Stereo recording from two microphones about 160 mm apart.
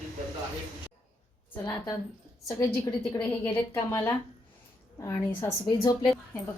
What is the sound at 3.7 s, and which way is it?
A woman's voice, 25° left (ahead or behind).